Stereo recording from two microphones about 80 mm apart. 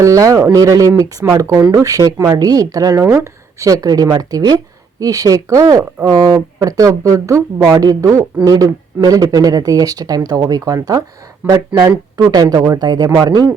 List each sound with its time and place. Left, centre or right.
0.0 s speech: right